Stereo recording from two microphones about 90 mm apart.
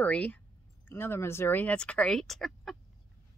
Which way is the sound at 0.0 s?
15° left (ahead or behind).